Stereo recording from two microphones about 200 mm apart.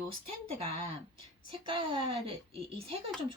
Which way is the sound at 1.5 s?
25° right (ahead or behind).